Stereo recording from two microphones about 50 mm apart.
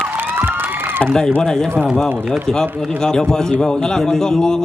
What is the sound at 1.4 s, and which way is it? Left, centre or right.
A man's voice, centre.